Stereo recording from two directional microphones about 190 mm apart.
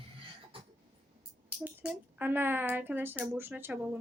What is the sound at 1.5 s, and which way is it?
Speech, 5° right (ahead or behind).